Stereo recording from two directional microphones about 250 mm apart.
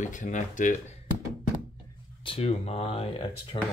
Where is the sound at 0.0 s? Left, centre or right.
Left.